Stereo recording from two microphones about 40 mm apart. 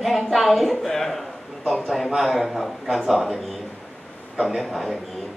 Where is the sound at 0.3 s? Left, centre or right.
Centre.